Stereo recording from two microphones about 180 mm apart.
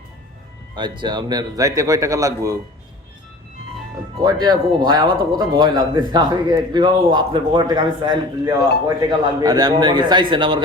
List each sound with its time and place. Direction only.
0.8 s speech: 25° right (ahead or behind)
4.2 s speech: 20° right (ahead or behind)